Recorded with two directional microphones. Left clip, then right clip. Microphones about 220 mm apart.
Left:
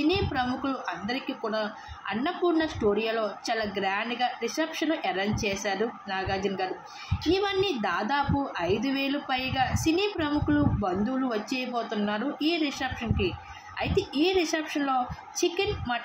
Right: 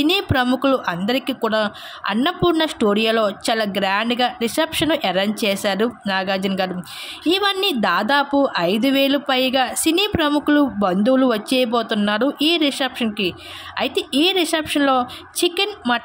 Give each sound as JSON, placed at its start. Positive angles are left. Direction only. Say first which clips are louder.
{"t": 0.0, "sound": "a woman's voice", "louder": "right 8 dB", "side_deg": -45}